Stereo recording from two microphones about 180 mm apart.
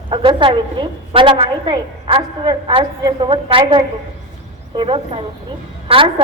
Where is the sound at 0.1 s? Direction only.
30° right (ahead or behind).